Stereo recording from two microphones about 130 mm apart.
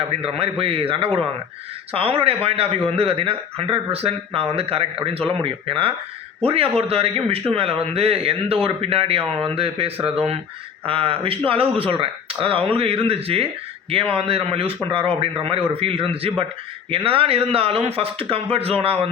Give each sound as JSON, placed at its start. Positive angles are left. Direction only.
{"t": 0.0, "sound": "a man's voice", "side_deg": -50}